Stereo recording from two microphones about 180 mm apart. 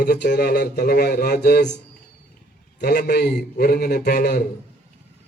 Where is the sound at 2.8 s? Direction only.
65° left (ahead or behind).